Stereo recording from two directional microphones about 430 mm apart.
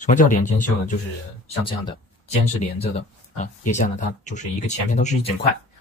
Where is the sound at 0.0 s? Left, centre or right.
Centre.